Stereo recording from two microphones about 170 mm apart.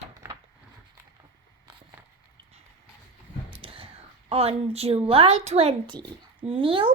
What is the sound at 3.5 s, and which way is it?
A woman's voice, 30° right (ahead or behind).